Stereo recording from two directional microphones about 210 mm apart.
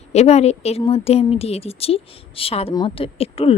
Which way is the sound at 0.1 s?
30° left (ahead or behind).